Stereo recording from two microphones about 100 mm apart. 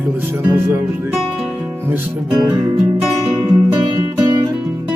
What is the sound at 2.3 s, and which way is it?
Music, 40° right (ahead or behind).